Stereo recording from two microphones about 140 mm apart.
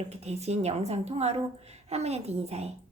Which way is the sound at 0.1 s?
50° right (ahead or behind).